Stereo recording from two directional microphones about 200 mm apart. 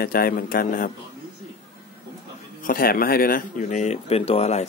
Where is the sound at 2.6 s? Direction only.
45° left (ahead or behind).